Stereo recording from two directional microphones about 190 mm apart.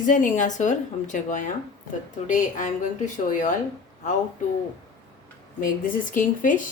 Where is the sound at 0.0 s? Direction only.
40° left (ahead or behind).